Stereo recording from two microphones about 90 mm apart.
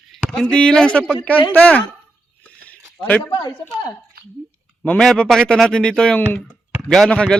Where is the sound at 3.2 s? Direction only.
55° left (ahead or behind).